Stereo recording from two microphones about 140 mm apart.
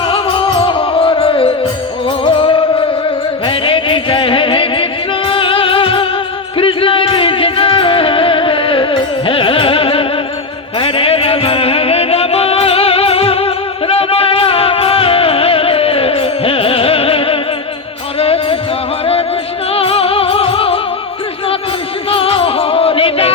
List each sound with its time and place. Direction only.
0.1 s music: 40° left (ahead or behind)
19.7 s music: 45° left (ahead or behind)
22.1 s music: 40° left (ahead or behind)